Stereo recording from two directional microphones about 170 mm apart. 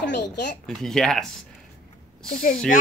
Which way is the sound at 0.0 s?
90° left.